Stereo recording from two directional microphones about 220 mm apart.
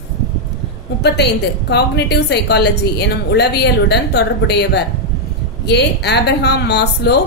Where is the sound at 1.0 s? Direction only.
50° left (ahead or behind).